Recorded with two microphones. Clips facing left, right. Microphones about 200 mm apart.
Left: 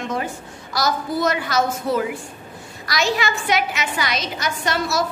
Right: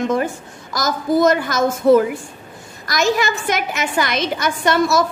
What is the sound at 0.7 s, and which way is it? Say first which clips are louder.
A woman's voice: right 5 dB; 45° right (ahead or behind).